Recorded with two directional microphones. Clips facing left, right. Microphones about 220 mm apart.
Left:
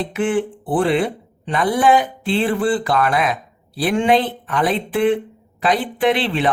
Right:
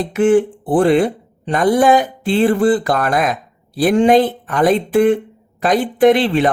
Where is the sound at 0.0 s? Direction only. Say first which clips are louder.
Right 7 dB; 45° right (ahead or behind).